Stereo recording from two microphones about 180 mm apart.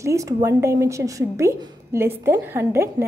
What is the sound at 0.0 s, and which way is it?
A woman's voice, 15° right (ahead or behind).